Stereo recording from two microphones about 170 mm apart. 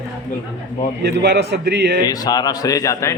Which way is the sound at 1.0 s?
75° right (ahead or behind).